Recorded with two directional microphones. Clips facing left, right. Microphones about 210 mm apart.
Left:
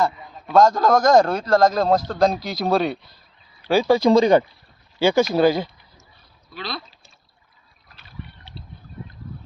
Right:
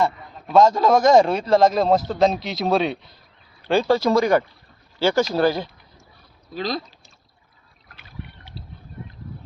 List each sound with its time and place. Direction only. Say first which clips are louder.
0.5 s a man's voice: even; 5° right (ahead or behind); by 5.6 s 15° left (ahead or behind)
6.5 s speech: right 6 dB; 40° right (ahead or behind)